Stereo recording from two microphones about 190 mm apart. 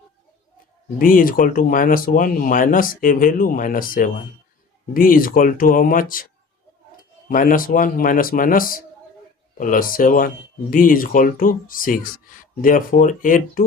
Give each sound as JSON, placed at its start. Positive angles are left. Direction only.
{"t": 0.9, "sound": "speech", "side_deg": 45}